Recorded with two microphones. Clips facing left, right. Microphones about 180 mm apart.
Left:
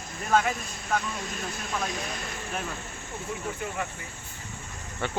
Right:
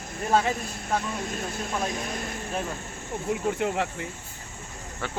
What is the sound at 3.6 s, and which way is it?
Speech, 75° right (ahead or behind).